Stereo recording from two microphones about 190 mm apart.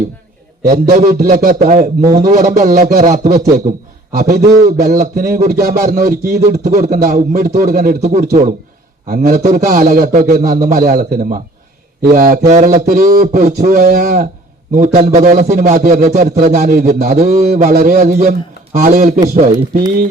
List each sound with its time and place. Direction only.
0.7 s a man's voice: 40° right (ahead or behind)
2.1 s a sound: 40° right (ahead or behind); by 5.8 s 55° right (ahead or behind)
6.4 s a man's voice: 40° right (ahead or behind)